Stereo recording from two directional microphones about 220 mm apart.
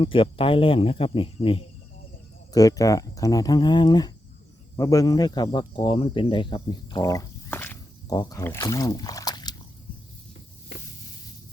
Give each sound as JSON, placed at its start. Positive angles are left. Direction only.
{"t": 0.0, "sound": "speech", "side_deg": 25}